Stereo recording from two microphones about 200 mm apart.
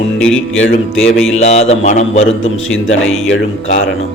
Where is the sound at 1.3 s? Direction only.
35° left (ahead or behind).